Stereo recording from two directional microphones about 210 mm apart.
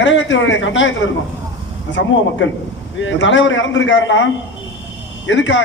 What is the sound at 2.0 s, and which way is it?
A man's voice, 60° left (ahead or behind).